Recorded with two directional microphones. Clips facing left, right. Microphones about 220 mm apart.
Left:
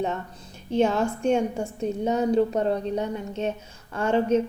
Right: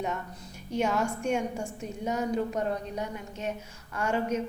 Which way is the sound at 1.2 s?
30° left (ahead or behind).